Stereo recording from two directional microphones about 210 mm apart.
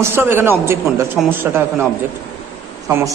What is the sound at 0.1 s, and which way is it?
A man's voice, 10° right (ahead or behind).